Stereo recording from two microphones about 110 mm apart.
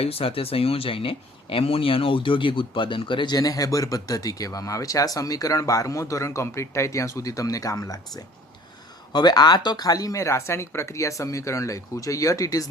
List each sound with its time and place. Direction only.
0.0 s speech: 60° left (ahead or behind); by 12.6 s 30° left (ahead or behind)